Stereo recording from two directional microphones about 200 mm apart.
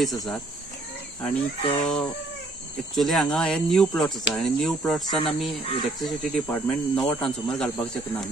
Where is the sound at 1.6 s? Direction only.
30° left (ahead or behind).